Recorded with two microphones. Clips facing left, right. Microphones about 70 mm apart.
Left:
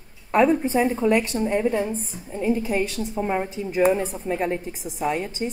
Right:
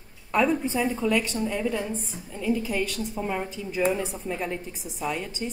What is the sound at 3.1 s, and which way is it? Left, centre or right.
A woman's voice, left.